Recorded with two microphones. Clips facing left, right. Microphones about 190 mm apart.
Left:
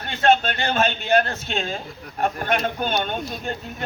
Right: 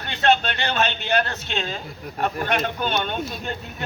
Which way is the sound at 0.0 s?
45° left (ahead or behind).